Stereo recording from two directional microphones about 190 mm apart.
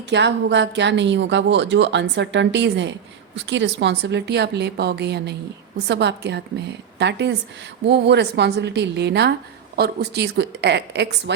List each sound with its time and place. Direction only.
0.1 s a woman's voice: 65° right (ahead or behind)